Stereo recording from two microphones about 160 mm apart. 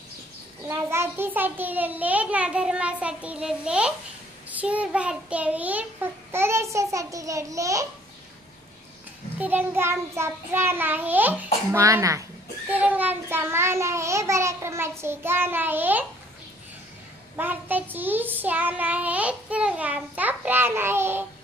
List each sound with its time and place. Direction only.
0.7 s child singing: 15° right (ahead or behind)
6.3 s a child's voice: 15° right (ahead or behind)
9.4 s child singing: 10° right (ahead or behind)
11.7 s a child's voice: 20° right (ahead or behind)
12.6 s child singing: 10° right (ahead or behind)
17.4 s child singing: 10° right (ahead or behind)